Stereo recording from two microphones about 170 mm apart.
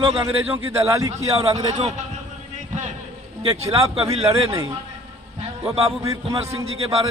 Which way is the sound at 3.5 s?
15° right (ahead or behind).